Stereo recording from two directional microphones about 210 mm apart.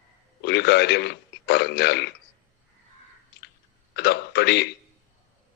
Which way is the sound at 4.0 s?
50° left (ahead or behind).